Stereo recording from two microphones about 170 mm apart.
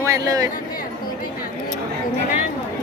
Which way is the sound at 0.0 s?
20° right (ahead or behind).